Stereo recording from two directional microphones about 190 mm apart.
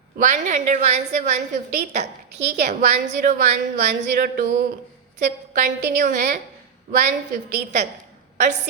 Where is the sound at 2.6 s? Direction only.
40° right (ahead or behind).